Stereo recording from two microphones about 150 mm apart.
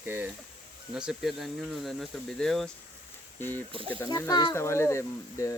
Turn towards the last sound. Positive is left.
turn(degrees=20)  # may be behind; listen again after turning